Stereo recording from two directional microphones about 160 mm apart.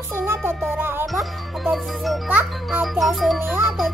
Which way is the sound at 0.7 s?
10° right (ahead or behind).